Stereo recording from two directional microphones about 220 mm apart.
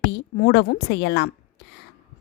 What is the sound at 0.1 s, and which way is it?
A woman's voice, 50° left (ahead or behind).